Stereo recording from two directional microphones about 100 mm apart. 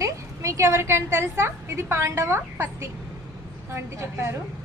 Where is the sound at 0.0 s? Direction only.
30° right (ahead or behind).